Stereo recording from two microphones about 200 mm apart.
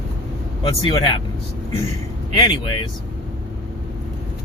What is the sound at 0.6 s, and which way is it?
Speech, 25° left (ahead or behind).